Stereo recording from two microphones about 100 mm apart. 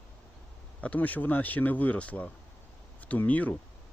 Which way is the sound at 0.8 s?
15° left (ahead or behind).